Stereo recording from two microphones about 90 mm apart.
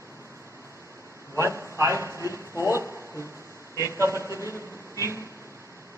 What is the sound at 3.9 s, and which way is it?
Speech, 30° right (ahead or behind).